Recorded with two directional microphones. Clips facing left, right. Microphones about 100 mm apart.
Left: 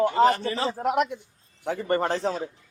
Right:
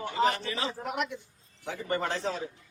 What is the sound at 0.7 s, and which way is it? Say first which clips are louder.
Speech: left 10 dB; 65° left (ahead or behind).